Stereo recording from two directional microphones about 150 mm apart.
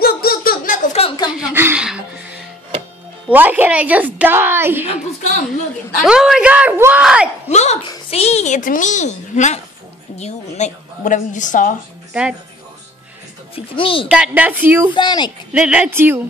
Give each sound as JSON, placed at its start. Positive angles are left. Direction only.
{"t": 0.0, "sound": "a sound", "side_deg": 90}
{"t": 1.0, "sound": "a sound", "side_deg": 40}
{"t": 1.3, "sound": "a woman's voice", "side_deg": -15}
{"t": 3.3, "sound": "speech", "side_deg": -10}
{"t": 6.0, "sound": "speech", "side_deg": -5}
{"t": 7.4, "sound": "a woman's voice", "side_deg": 50}
{"t": 12.1, "sound": "speech", "side_deg": -5}
{"t": 13.7, "sound": "speech", "side_deg": 35}
{"t": 14.0, "sound": "speech", "side_deg": -10}
{"t": 15.0, "sound": "speech", "side_deg": 30}
{"t": 15.5, "sound": "speech", "side_deg": -5}